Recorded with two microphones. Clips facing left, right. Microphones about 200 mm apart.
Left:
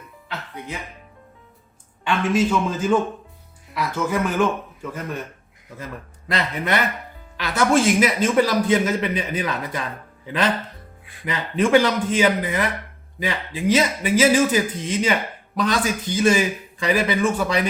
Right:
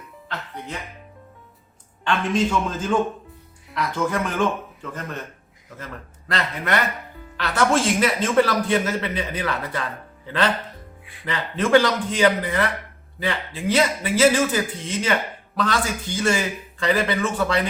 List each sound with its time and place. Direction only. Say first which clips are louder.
2.0 s a man's voice: left 2 dB; 5° left (ahead or behind)
11.0 s music: left 3 dB; 45° left (ahead or behind)
11.3 s a man's voice: left 1 dB; 15° left (ahead or behind)